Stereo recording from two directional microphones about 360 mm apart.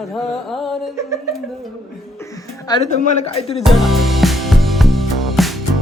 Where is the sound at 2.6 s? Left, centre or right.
Centre.